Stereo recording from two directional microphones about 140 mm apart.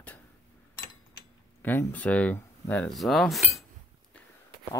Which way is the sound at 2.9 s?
Centre (ahead or behind).